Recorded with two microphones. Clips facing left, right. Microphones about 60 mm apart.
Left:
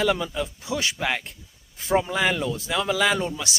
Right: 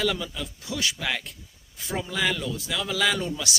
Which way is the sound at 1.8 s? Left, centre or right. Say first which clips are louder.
Left 6 dB; left.